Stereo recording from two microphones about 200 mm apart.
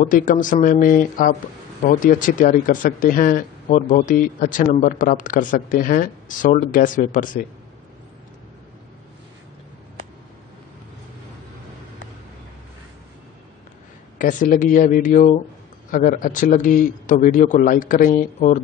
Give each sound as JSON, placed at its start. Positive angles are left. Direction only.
{"t": 0.0, "sound": "speech", "side_deg": 40}
{"t": 14.1, "sound": "speech", "side_deg": 40}